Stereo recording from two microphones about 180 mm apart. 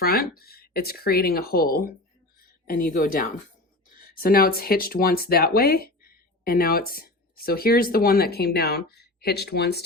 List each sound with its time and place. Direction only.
0.0 s speech: 55° left (ahead or behind)